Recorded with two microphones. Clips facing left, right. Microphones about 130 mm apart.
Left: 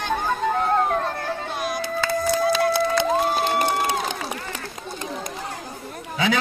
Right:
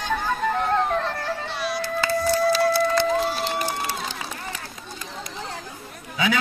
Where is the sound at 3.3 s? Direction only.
55° left (ahead or behind).